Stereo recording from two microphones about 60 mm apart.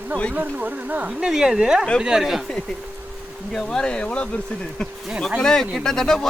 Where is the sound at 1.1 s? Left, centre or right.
Centre.